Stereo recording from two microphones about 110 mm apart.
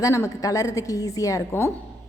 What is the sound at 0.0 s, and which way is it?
A woman's voice, 30° left (ahead or behind).